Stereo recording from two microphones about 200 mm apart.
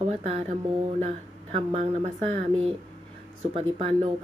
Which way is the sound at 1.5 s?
30° right (ahead or behind).